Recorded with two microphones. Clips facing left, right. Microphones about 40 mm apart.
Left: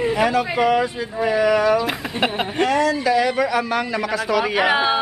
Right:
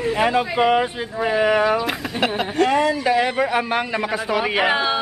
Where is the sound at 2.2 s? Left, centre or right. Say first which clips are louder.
Right 1 dB; centre.